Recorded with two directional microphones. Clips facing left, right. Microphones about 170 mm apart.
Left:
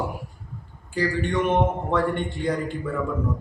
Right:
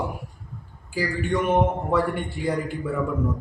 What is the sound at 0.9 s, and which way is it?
A man's voice, 5° right (ahead or behind).